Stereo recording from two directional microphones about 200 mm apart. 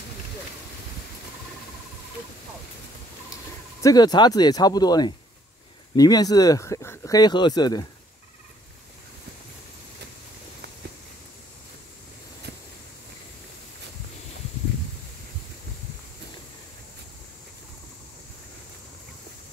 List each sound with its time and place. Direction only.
3.8 s speech: 20° left (ahead or behind)